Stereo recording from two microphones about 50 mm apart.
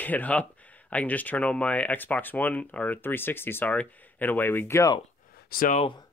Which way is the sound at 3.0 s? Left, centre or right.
Left.